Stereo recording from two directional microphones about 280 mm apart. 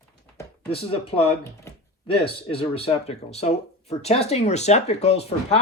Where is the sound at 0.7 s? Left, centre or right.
Centre.